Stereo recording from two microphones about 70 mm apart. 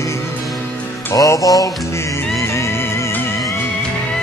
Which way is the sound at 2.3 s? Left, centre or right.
Left.